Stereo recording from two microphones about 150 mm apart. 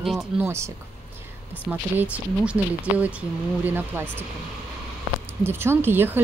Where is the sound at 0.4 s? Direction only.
20° right (ahead or behind).